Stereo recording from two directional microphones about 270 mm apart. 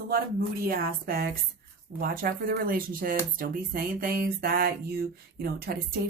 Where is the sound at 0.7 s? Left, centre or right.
Right.